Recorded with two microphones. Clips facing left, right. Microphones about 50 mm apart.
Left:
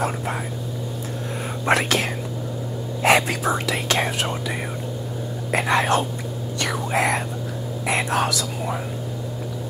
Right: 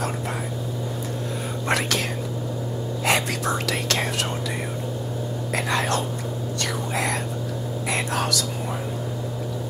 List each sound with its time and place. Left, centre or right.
1.7 s speech: left
3.4 s speech: centre
5.5 s speech: left